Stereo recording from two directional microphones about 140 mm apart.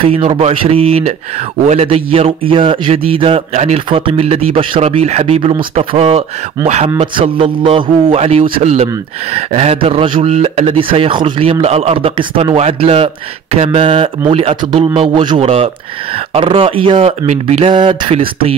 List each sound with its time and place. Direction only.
0.1 s a man's voice: 45° right (ahead or behind)
10.2 s a man's voice: 50° right (ahead or behind)
17.3 s speech: 55° right (ahead or behind)
17.6 s a man's voice: 40° right (ahead or behind)